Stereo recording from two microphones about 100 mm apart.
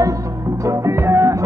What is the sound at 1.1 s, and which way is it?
Music, 30° right (ahead or behind).